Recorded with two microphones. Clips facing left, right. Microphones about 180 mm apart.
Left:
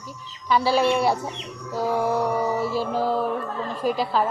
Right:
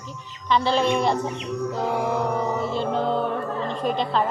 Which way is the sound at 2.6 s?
5° left (ahead or behind).